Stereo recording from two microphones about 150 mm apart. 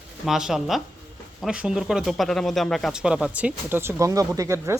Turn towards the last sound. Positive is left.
turn(degrees=-20)  # may be behind; listen again after turning